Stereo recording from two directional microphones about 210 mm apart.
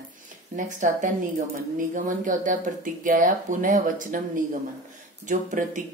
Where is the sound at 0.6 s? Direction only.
35° right (ahead or behind).